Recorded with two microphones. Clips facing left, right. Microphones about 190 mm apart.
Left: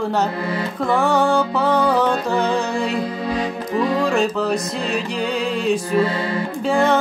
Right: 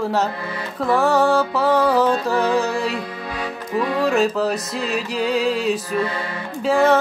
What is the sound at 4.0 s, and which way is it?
Music, 5° right (ahead or behind).